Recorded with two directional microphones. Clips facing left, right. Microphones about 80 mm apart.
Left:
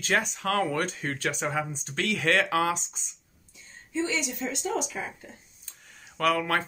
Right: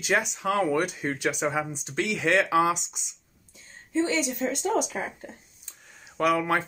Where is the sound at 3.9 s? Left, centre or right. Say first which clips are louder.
Right 4 dB; right.